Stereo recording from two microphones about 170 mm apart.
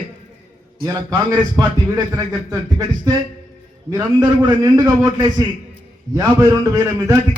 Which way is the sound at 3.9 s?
20° right (ahead or behind).